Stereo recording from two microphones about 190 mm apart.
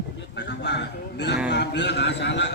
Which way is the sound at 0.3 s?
65° left (ahead or behind).